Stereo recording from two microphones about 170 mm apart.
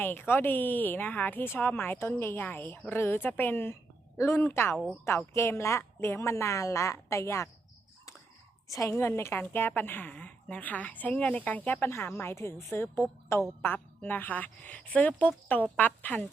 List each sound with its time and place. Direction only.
0.0 s a woman's voice: 10° left (ahead or behind)
8.7 s a woman's voice: 20° left (ahead or behind)